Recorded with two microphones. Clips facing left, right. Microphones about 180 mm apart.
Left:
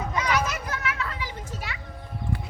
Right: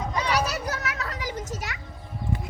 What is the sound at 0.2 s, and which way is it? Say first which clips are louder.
Children playing: even; 35° right (ahead or behind).